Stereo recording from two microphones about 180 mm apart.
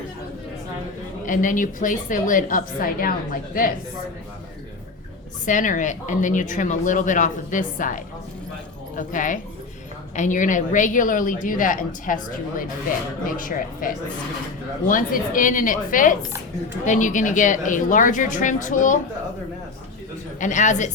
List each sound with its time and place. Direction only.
1.2 s speech: 45° left (ahead or behind)
5.5 s speech: 45° left (ahead or behind)
20.4 s speech: 45° left (ahead or behind)